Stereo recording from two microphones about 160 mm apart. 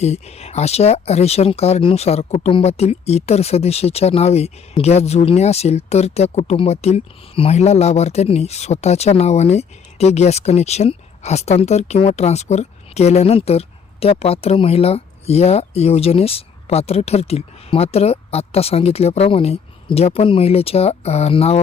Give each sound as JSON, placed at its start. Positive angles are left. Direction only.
{"t": 0.0, "sound": "speech", "side_deg": 40}